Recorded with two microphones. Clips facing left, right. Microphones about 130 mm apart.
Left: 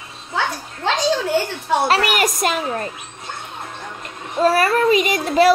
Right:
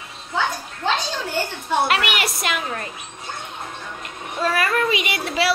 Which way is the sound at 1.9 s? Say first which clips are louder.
Left 5 dB; 40° left (ahead or behind).